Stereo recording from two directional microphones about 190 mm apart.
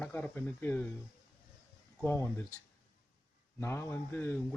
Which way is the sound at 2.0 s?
15° left (ahead or behind).